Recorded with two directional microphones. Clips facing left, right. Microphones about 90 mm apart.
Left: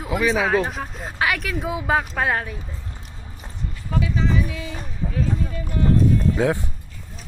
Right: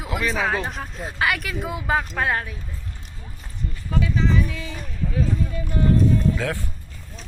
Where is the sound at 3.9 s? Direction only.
5° left (ahead or behind).